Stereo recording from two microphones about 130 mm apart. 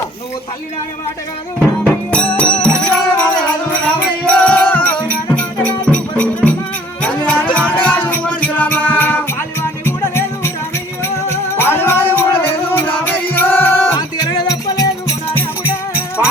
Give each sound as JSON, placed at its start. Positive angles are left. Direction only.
{"t": 1.5, "sound": "music", "side_deg": 10}
{"t": 14.3, "sound": "music", "side_deg": 30}
{"t": 15.6, "sound": "music", "side_deg": -10}